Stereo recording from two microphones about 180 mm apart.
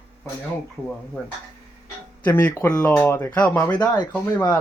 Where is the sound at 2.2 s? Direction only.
15° left (ahead or behind).